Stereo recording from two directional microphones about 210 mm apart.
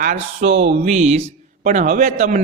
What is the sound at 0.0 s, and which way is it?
A man's voice, 35° right (ahead or behind).